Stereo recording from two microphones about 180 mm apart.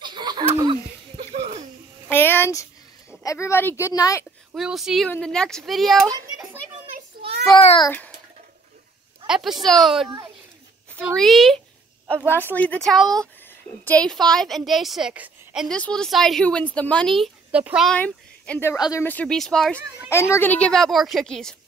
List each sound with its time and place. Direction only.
0.0 s a sound: 25° right (ahead or behind)
2.0 s a sound: 10° left (ahead or behind)
3.3 s speech: 15° left (ahead or behind)
4.6 s a woman's voice: centre (ahead or behind)
6.0 s children playing: 20° right (ahead or behind)
7.6 s a child's voice: 30° left (ahead or behind)
9.3 s a woman's voice: centre (ahead or behind)
10.0 s a child's voice: 20° right (ahead or behind)
11.1 s a woman's voice: centre (ahead or behind)
12.3 s a woman's voice: 10° left (ahead or behind); by 17.9 s 5° right (ahead or behind)
17.9 s speech: 5° left (ahead or behind)
20.1 s a woman's voice: 15° left (ahead or behind)